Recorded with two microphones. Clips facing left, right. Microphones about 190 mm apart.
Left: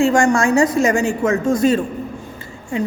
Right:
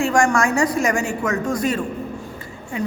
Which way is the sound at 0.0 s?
25° left (ahead or behind).